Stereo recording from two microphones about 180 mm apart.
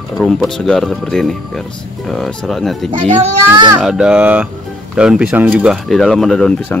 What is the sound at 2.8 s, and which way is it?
Speech, 30° right (ahead or behind).